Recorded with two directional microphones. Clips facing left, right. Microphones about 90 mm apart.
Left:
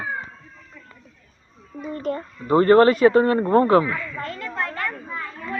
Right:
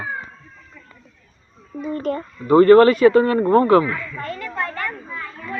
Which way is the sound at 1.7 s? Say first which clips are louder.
Right 5 dB; 10° right (ahead or behind).